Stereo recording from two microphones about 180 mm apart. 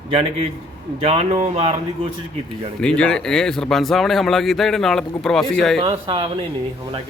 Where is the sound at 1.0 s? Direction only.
35° right (ahead or behind).